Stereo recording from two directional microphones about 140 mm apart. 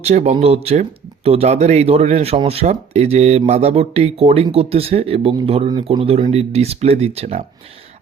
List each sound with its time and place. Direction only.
0.0 s speech: 50° right (ahead or behind)